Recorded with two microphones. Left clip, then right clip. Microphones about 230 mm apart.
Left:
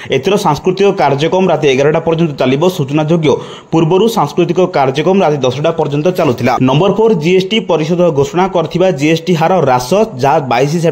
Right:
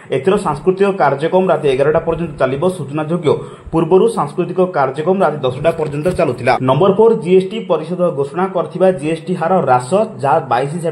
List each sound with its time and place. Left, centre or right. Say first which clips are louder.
0.1 s speech: left 3 dB; left